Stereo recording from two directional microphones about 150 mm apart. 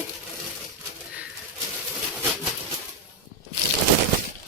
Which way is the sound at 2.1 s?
Centre (ahead or behind).